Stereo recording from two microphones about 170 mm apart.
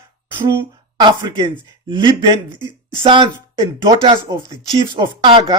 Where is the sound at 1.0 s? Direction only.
25° right (ahead or behind).